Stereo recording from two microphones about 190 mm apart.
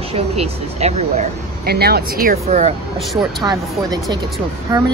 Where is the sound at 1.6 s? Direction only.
55° right (ahead or behind).